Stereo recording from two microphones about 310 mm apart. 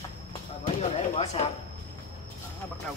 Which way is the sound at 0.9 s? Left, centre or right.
Left.